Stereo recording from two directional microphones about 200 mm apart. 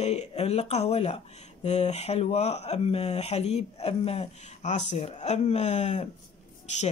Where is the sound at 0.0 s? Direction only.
30° left (ahead or behind).